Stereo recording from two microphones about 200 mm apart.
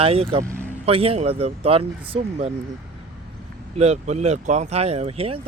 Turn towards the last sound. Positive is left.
turn(degrees=-30)  # may be behind; listen again after turning